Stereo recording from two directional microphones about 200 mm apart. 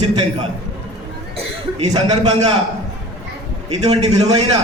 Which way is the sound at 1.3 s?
30° right (ahead or behind).